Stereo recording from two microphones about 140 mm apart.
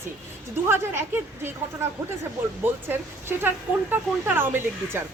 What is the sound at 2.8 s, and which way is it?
A woman's voice, 15° right (ahead or behind).